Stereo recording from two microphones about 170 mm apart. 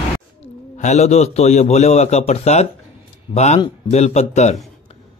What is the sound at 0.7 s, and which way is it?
A man's voice, 40° left (ahead or behind).